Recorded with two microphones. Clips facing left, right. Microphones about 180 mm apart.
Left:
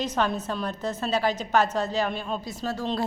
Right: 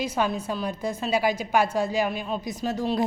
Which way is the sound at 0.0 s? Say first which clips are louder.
Even; 10° right (ahead or behind).